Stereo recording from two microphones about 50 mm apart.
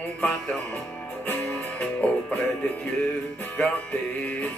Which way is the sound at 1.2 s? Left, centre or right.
Left.